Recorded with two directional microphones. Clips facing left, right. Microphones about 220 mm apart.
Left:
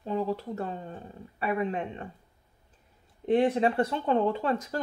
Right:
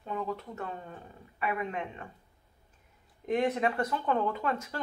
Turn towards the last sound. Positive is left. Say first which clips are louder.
# left 4 dB
turn(degrees=35)  # may be behind; listen again after turning